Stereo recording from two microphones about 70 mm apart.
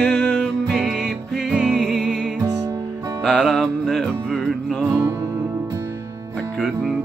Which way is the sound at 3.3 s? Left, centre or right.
Centre.